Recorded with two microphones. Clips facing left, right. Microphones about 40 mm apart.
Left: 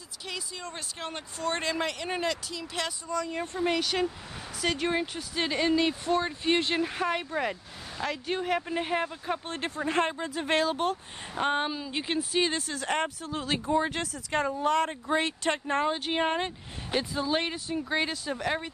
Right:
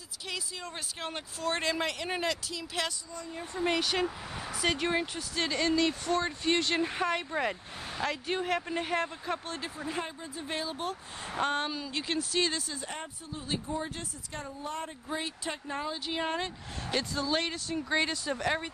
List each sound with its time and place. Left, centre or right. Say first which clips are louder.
0.3 s speech: left 1 dB; centre
3.1 s speech: left 9 dB; left
3.5 s speech: left 1 dB; centre
5.4 s speech: left 2 dB; centre
6.8 s speech: left 1 dB; centre
9.6 s speech: left 8 dB; left
11.4 s speech: left 4 dB; centre
12.7 s speech: left 10 dB; left
16.9 s speech: left 2 dB; centre
17.7 s speech: even; centre